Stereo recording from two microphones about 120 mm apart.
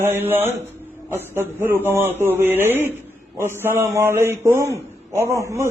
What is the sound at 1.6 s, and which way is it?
A man's voice, 20° right (ahead or behind).